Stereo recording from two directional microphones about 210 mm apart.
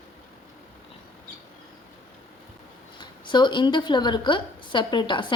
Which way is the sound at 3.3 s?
20° left (ahead or behind).